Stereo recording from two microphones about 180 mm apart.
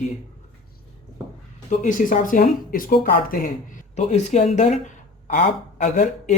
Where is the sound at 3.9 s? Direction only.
40° left (ahead or behind).